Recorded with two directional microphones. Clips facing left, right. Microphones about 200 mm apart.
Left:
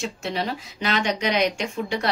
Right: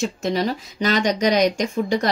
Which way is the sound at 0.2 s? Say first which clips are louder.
Right 5 dB; 40° right (ahead or behind).